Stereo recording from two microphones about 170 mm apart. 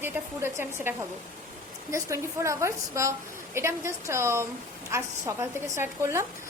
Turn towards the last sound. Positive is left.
turn(degrees=-15)  # may be behind; listen again after turning